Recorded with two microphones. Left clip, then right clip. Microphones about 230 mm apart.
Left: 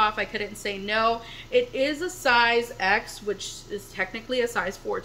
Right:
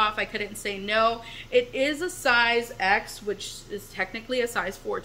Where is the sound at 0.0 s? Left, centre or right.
Centre.